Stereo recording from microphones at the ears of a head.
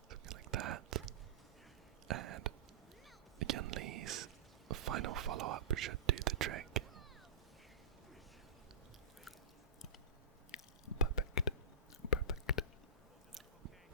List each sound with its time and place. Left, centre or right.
0.1 s whispering: right
2.0 s a sound: right
3.3 s whispering: right
10.5 s chewing: left
12.0 s whispering: left